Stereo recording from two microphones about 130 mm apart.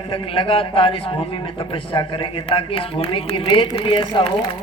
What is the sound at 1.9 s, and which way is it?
A woman's voice, 40° left (ahead or behind).